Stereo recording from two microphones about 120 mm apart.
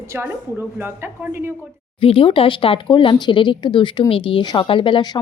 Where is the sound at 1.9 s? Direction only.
50° left (ahead or behind).